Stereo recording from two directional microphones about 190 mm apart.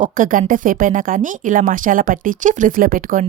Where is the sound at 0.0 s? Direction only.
45° right (ahead or behind).